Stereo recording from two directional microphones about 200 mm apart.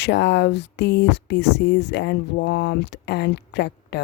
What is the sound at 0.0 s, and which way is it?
Speech, 60° left (ahead or behind).